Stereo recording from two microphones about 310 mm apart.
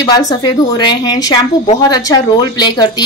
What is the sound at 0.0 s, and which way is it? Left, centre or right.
A woman's voice, centre.